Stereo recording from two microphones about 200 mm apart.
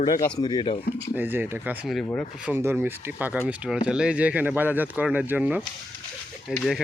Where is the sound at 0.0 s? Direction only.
20° left (ahead or behind).